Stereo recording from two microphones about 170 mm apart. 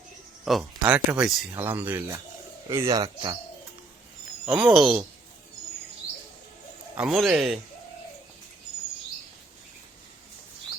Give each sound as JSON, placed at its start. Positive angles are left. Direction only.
{"t": 0.4, "sound": "a man's voice", "side_deg": 0}
{"t": 4.4, "sound": "speech", "side_deg": -5}
{"t": 6.9, "sound": "speech", "side_deg": -5}